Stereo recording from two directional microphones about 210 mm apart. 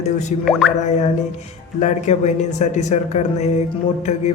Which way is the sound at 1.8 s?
35° left (ahead or behind).